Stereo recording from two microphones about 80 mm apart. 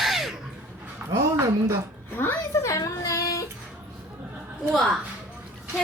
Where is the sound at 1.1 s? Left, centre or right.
Right.